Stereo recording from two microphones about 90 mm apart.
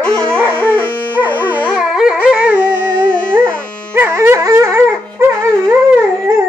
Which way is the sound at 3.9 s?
25° right (ahead or behind).